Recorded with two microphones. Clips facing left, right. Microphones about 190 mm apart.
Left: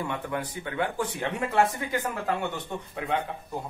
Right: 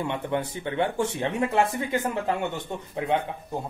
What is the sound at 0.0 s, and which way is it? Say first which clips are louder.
Speech: right 4 dB; 25° right (ahead or behind).